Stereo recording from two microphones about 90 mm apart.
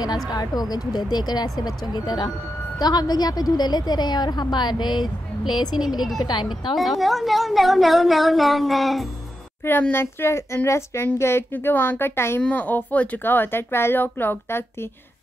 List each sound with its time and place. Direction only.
0.0 s speech: 50° left (ahead or behind)
6.7 s a woman's voice: centre (ahead or behind)
9.7 s speech: 20° left (ahead or behind)